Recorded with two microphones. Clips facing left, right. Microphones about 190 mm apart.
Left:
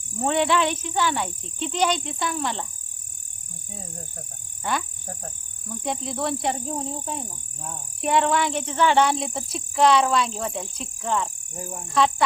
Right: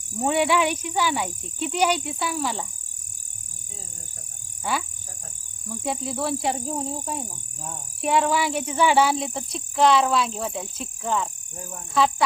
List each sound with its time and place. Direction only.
0.2 s speech: 10° right (ahead or behind)
4.7 s speech: 5° right (ahead or behind)